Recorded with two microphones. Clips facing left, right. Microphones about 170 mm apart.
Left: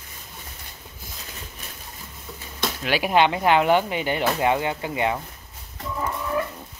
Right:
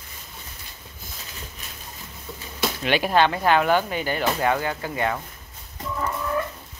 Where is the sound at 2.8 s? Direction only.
10° left (ahead or behind).